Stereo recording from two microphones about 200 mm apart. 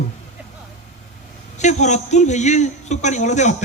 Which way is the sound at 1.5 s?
35° left (ahead or behind).